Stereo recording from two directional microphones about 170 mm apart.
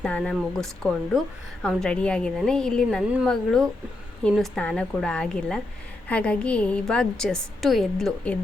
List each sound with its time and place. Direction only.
0.0 s a woman's voice: 5° left (ahead or behind)